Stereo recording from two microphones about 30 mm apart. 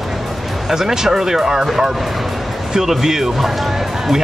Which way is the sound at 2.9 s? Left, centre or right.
Centre.